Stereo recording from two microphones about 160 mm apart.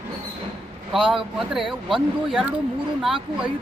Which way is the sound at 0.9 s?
5° right (ahead or behind).